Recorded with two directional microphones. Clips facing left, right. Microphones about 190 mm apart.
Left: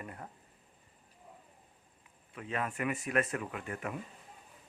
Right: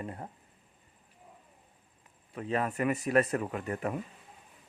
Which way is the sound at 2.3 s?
35° right (ahead or behind).